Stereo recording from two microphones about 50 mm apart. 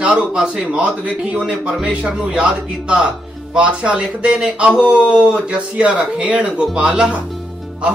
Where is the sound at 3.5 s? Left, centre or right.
Right.